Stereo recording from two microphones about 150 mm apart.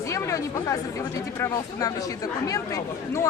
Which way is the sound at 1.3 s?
20° left (ahead or behind).